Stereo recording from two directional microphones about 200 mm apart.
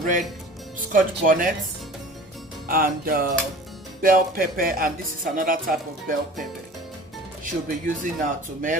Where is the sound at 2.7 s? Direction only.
45° right (ahead or behind).